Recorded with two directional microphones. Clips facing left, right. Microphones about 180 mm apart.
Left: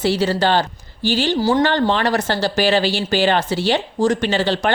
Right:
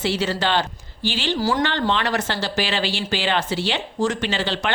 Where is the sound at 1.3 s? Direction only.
25° left (ahead or behind).